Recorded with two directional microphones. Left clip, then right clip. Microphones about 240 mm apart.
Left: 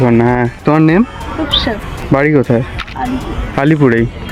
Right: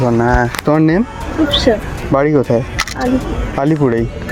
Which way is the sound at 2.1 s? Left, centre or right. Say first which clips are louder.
Left 1 dB; left.